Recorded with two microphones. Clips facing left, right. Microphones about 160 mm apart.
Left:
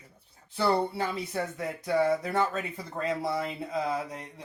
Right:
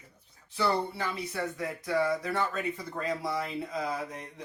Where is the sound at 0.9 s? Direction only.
25° left (ahead or behind).